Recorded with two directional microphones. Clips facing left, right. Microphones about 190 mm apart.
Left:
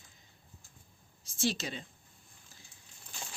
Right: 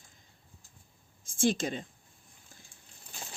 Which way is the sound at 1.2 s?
50° right (ahead or behind).